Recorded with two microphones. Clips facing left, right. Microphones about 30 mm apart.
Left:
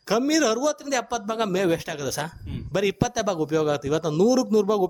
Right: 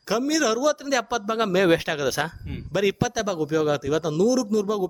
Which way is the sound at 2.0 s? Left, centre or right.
Right.